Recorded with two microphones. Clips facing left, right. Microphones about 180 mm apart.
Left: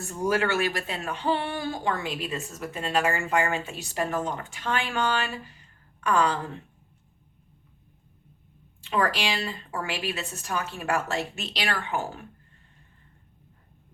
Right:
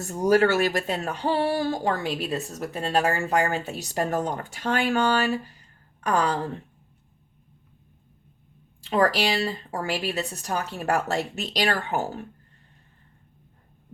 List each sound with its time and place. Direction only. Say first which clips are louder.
0.1 s speech: right 6 dB; 40° right (ahead or behind)
8.8 s speech: right 4 dB; 35° right (ahead or behind)